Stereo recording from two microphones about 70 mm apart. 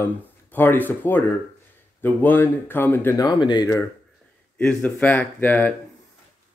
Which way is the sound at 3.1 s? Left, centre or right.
Left.